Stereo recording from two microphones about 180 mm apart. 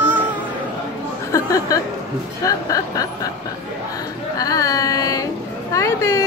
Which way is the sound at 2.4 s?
20° left (ahead or behind).